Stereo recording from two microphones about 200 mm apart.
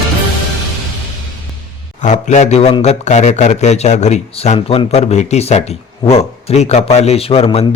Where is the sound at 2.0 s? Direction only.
35° left (ahead or behind).